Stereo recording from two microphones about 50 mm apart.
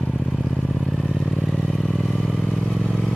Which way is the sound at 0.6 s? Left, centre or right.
Centre.